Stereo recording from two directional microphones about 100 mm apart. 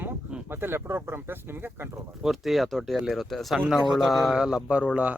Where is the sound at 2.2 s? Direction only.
Centre (ahead or behind).